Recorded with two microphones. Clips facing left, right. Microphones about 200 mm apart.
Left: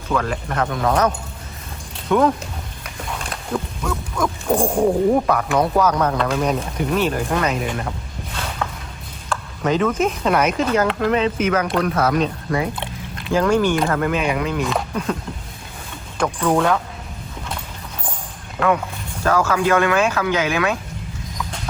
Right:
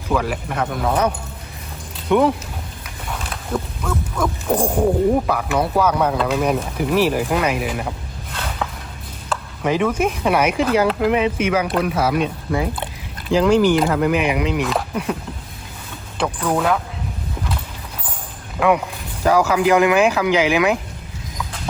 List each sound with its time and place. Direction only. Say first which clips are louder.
0.1 s speech: right 1 dB; 5° right (ahead or behind)
3.1 s a sound: right 1 dB; centre (ahead or behind)
5.2 s speech: left 2 dB; 5° right (ahead or behind)
9.3 s a sound: even; 10° right (ahead or behind)
10.2 s speech: right 2 dB; 10° right (ahead or behind)
13.4 s speech: right 3 dB; 15° right (ahead or behind)
16.2 s speech: left 2 dB; 5° right (ahead or behind)
19.2 s speech: right 2 dB; 15° right (ahead or behind)